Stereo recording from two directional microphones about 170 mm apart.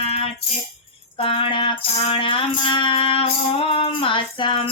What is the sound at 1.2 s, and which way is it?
Music, 30° left (ahead or behind).